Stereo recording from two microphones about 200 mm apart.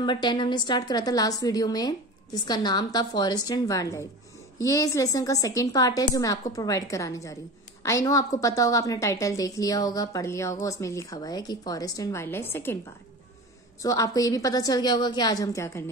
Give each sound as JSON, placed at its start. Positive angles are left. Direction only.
{"t": 0.0, "sound": "a woman's voice", "side_deg": 25}
{"t": 13.8, "sound": "a woman's voice", "side_deg": 15}